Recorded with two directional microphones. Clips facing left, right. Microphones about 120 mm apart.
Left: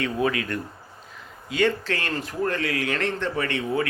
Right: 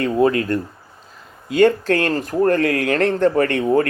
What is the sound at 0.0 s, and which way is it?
Speech, 40° right (ahead or behind).